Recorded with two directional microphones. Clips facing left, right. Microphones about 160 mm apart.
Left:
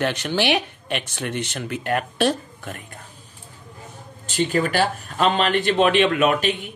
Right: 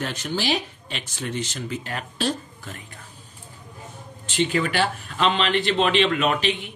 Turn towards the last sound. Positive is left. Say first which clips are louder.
# left 3 dB
turn(degrees=50)  # may be behind; listen again after turning